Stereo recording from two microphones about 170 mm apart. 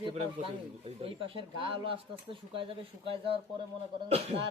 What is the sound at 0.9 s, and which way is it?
Speech, 35° right (ahead or behind).